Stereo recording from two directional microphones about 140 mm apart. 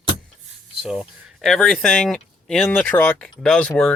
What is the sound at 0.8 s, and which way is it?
Speech, 5° right (ahead or behind).